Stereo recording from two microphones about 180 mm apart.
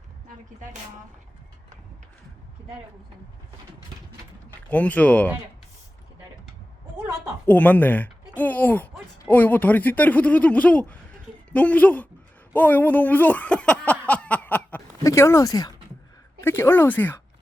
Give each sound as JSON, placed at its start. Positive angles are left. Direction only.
{"t": 4.7, "sound": "speech", "side_deg": 10}
{"t": 7.4, "sound": "speech", "side_deg": 10}